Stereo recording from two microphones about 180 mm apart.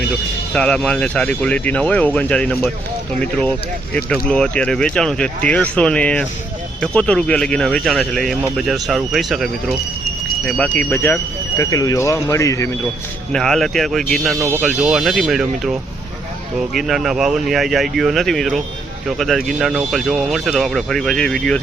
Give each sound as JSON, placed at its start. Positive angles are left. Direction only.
{"t": 0.5, "sound": "speech", "side_deg": 5}
{"t": 10.8, "sound": "speech", "side_deg": 10}
{"t": 13.3, "sound": "speech", "side_deg": 0}
{"t": 14.3, "sound": "speech", "side_deg": -15}